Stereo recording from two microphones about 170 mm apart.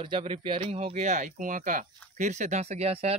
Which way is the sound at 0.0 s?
30° right (ahead or behind).